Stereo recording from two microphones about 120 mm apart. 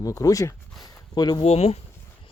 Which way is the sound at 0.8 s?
35° left (ahead or behind).